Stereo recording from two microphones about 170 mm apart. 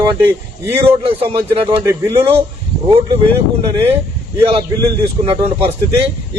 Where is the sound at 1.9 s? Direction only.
20° right (ahead or behind).